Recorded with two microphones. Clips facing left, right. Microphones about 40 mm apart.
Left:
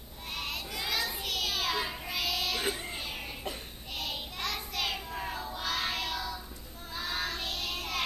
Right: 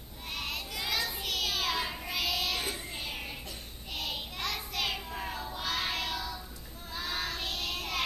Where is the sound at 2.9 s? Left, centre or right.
Centre.